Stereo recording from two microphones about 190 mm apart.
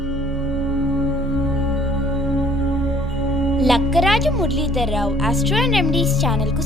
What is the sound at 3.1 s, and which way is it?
Speech, centre (ahead or behind).